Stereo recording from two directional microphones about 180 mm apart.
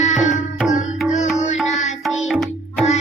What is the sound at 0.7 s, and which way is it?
Music, 40° left (ahead or behind).